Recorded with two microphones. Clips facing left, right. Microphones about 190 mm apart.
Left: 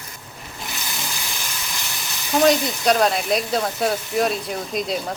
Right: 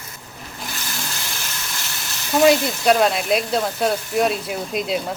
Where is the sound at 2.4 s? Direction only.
5° right (ahead or behind).